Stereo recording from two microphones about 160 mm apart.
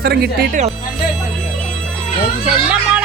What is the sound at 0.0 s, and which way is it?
Speech, 80° right.